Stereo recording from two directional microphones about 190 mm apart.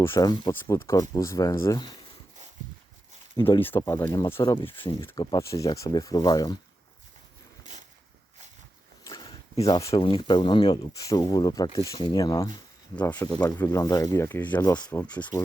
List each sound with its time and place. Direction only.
0.0 s speech: 15° left (ahead or behind)
3.6 s speech: 15° left (ahead or behind)
7.6 s a sound: 40° right (ahead or behind)
9.0 s speech: 20° left (ahead or behind)